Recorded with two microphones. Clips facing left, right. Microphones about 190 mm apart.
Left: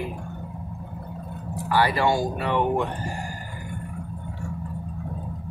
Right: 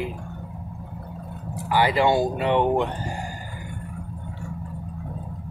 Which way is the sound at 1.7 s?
20° right (ahead or behind).